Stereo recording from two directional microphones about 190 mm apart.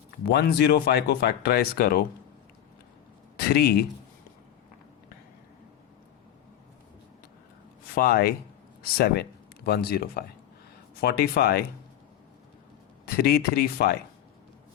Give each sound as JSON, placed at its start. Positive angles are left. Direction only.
{"t": 0.3, "sound": "speech", "side_deg": 60}
{"t": 3.3, "sound": "speech", "side_deg": 55}
{"t": 7.9, "sound": "speech", "side_deg": 55}
{"t": 13.1, "sound": "speech", "side_deg": 55}